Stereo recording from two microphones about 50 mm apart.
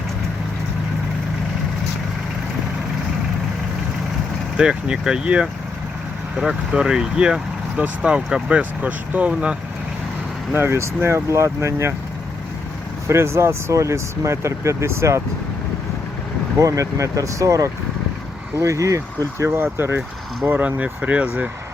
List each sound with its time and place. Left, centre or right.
4.5 s speech: centre
6.4 s speech: centre; by 9.6 s right
10.5 s speech: right
10.8 s speech: right
13.1 s speech: right
16.6 s speech: right
19.7 s speech: right
20.4 s speech: right